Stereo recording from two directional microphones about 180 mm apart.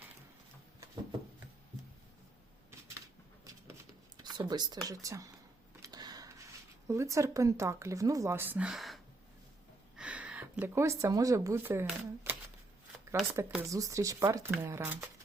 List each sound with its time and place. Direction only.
4.2 s speech: 25° right (ahead or behind)
5.8 s a sound: 20° right (ahead or behind)
6.8 s speech: 15° right (ahead or behind); by 9.0 s centre (ahead or behind)
10.0 s speech: 5° right (ahead or behind)
13.5 s speech: 15° right (ahead or behind)